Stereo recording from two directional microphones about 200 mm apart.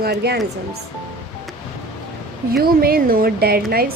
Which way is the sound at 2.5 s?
50° right (ahead or behind).